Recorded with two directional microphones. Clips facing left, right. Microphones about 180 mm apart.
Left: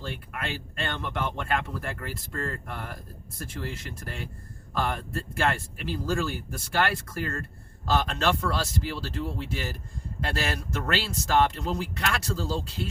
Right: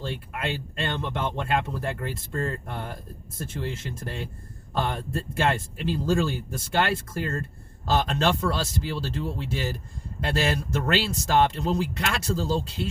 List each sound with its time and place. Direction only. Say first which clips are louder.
0.0 s speech: right 4 dB; 25° right (ahead or behind)